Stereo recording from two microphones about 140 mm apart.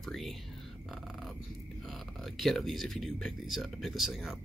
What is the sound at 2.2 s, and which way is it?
Speech, centre (ahead or behind).